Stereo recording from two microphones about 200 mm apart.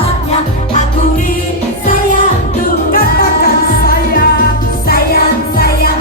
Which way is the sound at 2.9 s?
50° left (ahead or behind).